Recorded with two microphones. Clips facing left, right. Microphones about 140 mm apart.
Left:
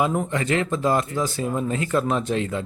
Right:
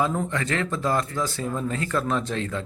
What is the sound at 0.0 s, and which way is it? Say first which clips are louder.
Speech: left 2 dB; 15° left (ahead or behind).